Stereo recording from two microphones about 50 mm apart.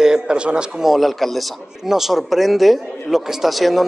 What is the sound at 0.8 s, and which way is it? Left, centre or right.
Speech, centre.